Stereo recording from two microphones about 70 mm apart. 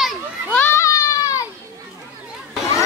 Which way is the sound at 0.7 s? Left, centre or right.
Left.